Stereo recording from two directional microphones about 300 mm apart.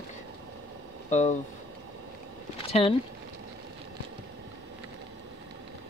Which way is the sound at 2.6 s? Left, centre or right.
Centre.